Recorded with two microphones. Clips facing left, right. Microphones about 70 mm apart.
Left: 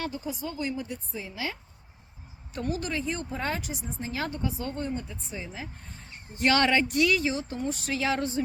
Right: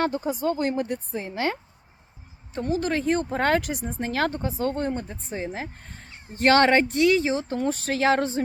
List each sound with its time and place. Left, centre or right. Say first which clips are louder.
0.0 s speech: right 9 dB; right
2.6 s speech: right 6 dB; right
2.9 s speech: right 8 dB; right
4.4 s speech: right 6 dB; right
7.5 s speech: right 5 dB; right